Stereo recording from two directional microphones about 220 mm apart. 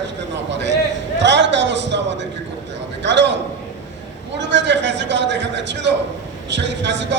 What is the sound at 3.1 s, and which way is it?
Speech, 55° right (ahead or behind).